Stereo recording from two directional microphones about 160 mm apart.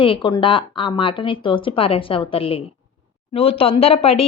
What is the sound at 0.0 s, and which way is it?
Speech, 30° left (ahead or behind).